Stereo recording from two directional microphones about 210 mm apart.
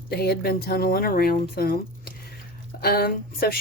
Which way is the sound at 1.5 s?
45° left (ahead or behind).